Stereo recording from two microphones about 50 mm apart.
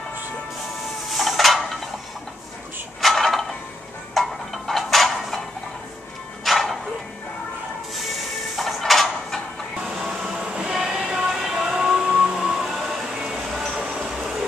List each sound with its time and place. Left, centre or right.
1.0 s dishes: centre
3.0 s a sound: centre
4.1 s music: centre
6.4 s music: centre
7.9 s music: centre
9.9 s train: centre
10.3 s train: right
12.5 s music: centre